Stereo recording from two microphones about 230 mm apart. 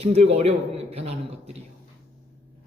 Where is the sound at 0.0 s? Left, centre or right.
Right.